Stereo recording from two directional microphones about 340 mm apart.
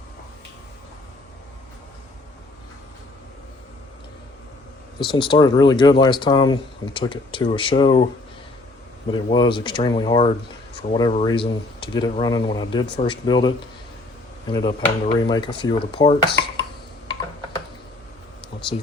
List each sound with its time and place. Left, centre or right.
4.9 s speech: centre
9.1 s speech: centre
14.5 s speech: centre
18.5 s a sound: centre